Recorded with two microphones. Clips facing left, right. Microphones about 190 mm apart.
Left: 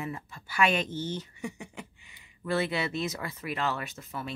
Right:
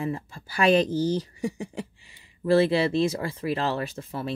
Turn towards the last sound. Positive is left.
turn(degrees=-35)  # may be behind; listen again after turning